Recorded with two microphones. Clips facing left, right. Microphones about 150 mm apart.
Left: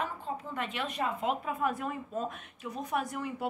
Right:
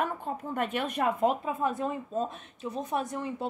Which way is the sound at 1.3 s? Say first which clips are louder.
Right 3 dB; 30° right (ahead or behind).